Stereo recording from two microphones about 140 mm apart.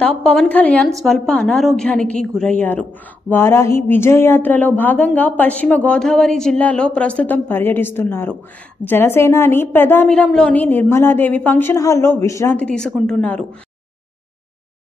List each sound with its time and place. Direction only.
0.0 s a woman's voice: 5° left (ahead or behind); by 12.5 s 20° left (ahead or behind)
12.5 s a woman's voice: 5° left (ahead or behind)